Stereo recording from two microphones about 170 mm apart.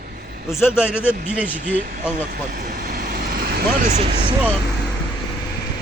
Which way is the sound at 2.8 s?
70° right (ahead or behind).